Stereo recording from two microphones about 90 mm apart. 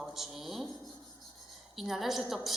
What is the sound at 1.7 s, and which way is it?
Speech, centre (ahead or behind).